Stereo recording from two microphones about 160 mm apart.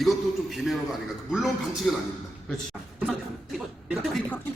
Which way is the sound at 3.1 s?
5° right (ahead or behind).